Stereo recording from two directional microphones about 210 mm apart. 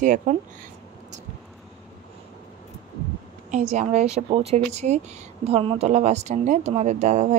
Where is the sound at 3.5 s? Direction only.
35° right (ahead or behind).